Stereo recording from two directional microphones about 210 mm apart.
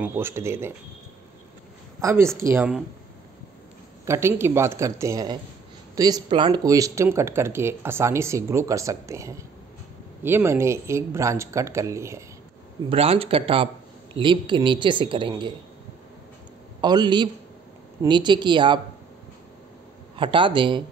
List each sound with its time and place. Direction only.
0.0 s speech: 10° right (ahead or behind)
2.0 s a woman's voice: 15° right (ahead or behind)
4.0 s speech: 10° right (ahead or behind)
12.9 s speech: 25° right (ahead or behind)
16.8 s speech: 20° right (ahead or behind)
20.2 s speech: 25° right (ahead or behind)